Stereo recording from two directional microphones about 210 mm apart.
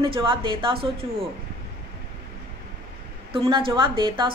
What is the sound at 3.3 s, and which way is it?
A woman's voice, 25° right (ahead or behind).